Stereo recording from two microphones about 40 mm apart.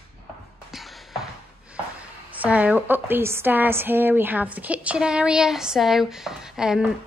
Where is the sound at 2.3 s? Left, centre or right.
Right.